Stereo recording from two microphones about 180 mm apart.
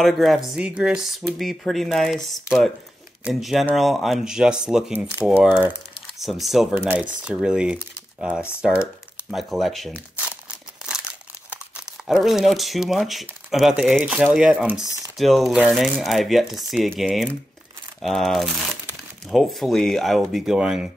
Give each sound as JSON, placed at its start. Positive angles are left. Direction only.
{"t": 0.0, "sound": "speech", "side_deg": 0}
{"t": 11.8, "sound": "speech", "side_deg": 0}